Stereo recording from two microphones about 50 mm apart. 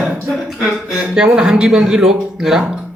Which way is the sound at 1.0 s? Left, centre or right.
Centre.